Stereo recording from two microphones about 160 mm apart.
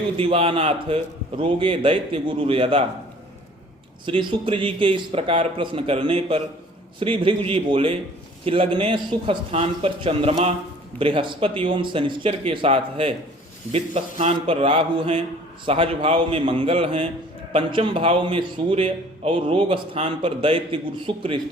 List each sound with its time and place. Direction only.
0.2 s a man's voice: 35° right (ahead or behind)
4.0 s a man's voice: 30° right (ahead or behind)